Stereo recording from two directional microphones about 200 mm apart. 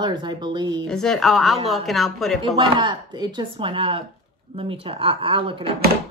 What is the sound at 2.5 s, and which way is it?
Speech, 25° right (ahead or behind).